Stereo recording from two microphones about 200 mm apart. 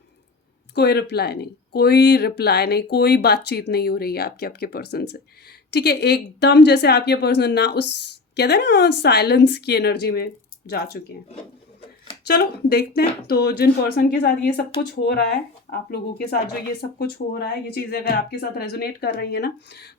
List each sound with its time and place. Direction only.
0.8 s a woman's voice: 55° left (ahead or behind)
12.2 s speech: 50° left (ahead or behind)